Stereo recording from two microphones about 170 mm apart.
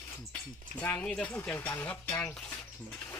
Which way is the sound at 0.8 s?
10° left (ahead or behind).